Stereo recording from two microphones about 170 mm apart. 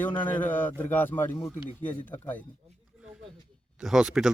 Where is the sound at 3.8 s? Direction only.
5° right (ahead or behind).